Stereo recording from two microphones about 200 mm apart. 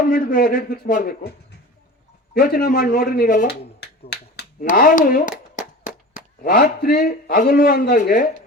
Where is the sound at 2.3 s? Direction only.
45° left (ahead or behind).